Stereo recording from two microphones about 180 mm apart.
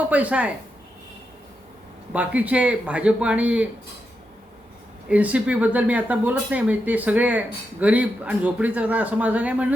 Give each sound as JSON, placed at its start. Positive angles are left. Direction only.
{"t": 0.1, "sound": "speech", "side_deg": -5}
{"t": 2.1, "sound": "speech", "side_deg": -10}
{"t": 5.0, "sound": "speech", "side_deg": -5}